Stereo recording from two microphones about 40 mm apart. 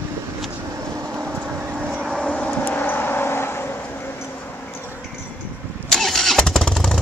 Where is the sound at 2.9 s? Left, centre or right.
Left.